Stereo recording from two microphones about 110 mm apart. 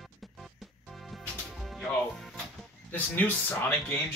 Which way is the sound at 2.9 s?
15° left (ahead or behind).